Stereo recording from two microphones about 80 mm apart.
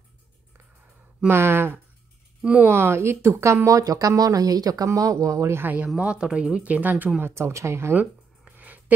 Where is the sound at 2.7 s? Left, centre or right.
Right.